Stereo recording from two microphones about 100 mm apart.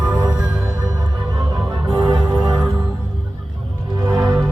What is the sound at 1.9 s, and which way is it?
Music, 45° right (ahead or behind).